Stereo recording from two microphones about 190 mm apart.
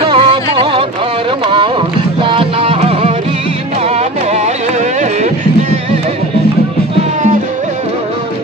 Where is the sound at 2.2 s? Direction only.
30° right (ahead or behind).